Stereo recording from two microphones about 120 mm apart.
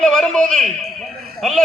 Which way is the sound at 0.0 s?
5° left (ahead or behind).